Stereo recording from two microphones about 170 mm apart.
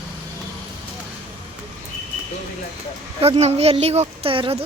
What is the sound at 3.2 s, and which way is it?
A woman's voice, 40° right (ahead or behind).